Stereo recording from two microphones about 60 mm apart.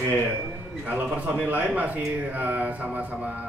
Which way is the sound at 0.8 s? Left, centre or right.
Right.